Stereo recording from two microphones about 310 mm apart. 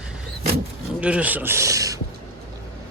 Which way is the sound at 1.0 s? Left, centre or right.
Centre.